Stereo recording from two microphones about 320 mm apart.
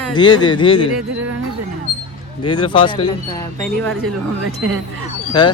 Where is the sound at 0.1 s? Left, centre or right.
Centre.